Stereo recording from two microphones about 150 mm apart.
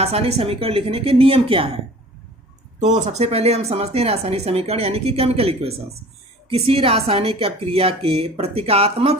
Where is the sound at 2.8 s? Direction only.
45° right (ahead or behind).